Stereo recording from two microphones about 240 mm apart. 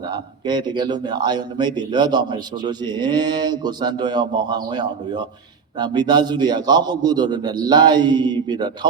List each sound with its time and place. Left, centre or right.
0.1 s a man's voice: centre